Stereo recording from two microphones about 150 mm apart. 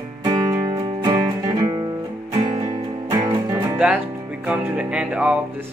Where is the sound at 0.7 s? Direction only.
30° right (ahead or behind).